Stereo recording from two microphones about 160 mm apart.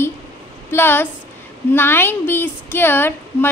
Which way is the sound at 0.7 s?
15° left (ahead or behind).